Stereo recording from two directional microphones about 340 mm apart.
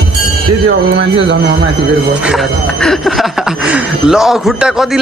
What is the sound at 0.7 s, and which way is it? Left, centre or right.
Speech, right.